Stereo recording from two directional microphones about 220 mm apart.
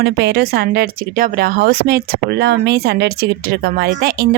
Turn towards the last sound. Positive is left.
turn(degrees=-45)  # may be behind; listen again after turning